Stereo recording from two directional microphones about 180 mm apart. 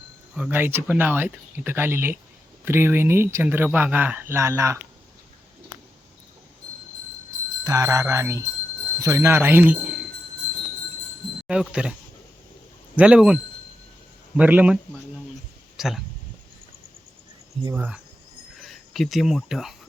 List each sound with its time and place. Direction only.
0.3 s speech: 10° right (ahead or behind)
7.6 s speech: 20° right (ahead or behind)
11.4 s speech: 5° right (ahead or behind)
13.0 s speech: 5° right (ahead or behind)
15.8 s speech: centre (ahead or behind)
17.7 s speech: 10° right (ahead or behind)